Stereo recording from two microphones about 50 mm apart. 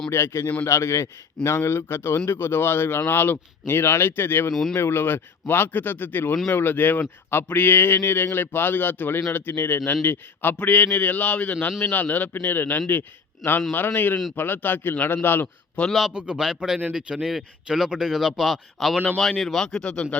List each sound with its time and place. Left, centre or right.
0.1 s speech: left
0.6 s a man's voice: left
7.0 s a man's voice: left
15.9 s speech: centre
16.1 s speech: right; by 18.9 s centre
19.5 s speech: centre